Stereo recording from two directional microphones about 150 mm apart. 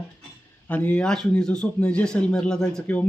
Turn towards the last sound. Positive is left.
turn(degrees=5)  # may be behind; listen again after turning